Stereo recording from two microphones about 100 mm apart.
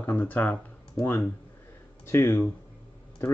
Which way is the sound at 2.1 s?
25° left (ahead or behind).